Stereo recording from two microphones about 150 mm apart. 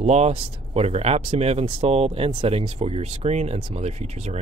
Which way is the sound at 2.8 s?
45° right (ahead or behind).